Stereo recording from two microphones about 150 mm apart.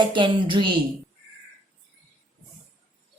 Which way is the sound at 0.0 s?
30° right (ahead or behind).